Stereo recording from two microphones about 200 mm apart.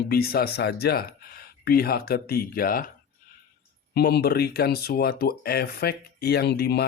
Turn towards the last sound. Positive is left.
turn(degrees=55)  # may be behind; listen again after turning